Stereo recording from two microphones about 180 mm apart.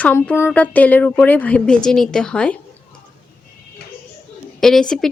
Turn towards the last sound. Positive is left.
turn(degrees=5)  # may be behind; listen again after turning